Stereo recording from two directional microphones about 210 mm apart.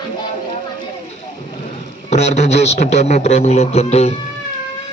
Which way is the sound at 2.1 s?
30° left (ahead or behind).